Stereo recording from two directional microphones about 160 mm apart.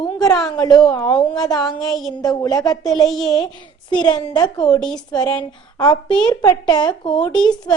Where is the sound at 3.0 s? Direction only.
Centre (ahead or behind).